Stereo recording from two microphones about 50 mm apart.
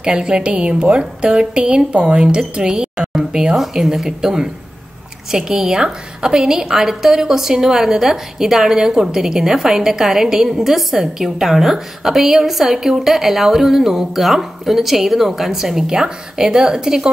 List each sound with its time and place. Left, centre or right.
0.0 s a woman's voice: centre